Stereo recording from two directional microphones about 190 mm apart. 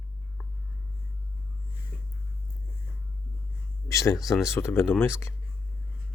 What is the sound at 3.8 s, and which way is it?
Speech, 15° left (ahead or behind).